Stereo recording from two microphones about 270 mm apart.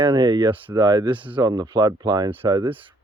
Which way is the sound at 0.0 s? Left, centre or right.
Centre.